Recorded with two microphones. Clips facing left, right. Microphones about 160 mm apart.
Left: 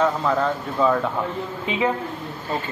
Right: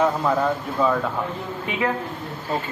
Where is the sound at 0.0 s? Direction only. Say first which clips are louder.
Even; 10° right (ahead or behind).